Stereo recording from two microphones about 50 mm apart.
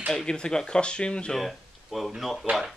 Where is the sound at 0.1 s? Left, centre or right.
Centre.